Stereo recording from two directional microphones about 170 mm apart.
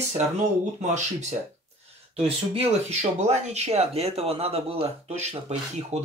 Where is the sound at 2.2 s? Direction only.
35° right (ahead or behind).